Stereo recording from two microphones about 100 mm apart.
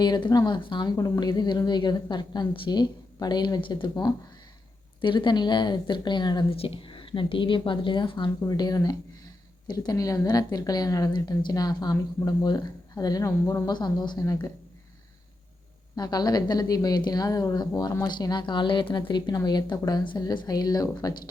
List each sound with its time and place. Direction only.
0.0 s a woman's voice: 45° left (ahead or behind)
0.9 s a woman's voice: 40° left (ahead or behind)
4.9 s a woman's voice: 55° left (ahead or behind)
6.5 s a woman's voice: 65° left (ahead or behind)
8.4 s a woman's voice: 40° left (ahead or behind)
16.0 s a woman's voice: 40° left (ahead or behind)